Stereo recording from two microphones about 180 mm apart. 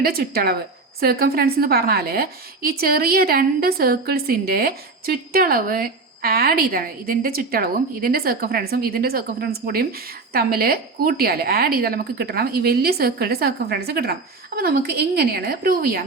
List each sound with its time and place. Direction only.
0.0 s a woman's voice: 55° right (ahead or behind)